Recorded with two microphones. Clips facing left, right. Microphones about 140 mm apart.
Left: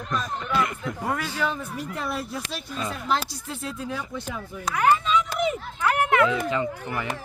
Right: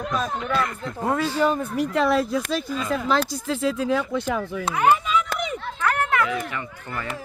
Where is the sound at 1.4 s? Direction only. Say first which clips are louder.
Right 7 dB; 45° right (ahead or behind).